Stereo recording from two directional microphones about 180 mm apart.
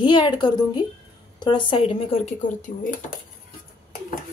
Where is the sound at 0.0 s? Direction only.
25° left (ahead or behind).